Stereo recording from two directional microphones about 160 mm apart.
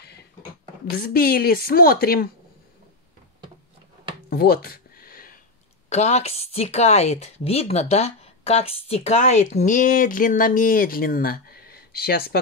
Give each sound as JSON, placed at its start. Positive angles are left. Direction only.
{"t": 0.9, "sound": "speech", "side_deg": 65}
{"t": 4.3, "sound": "a sound", "side_deg": 70}
{"t": 5.9, "sound": "a woman's voice", "side_deg": 45}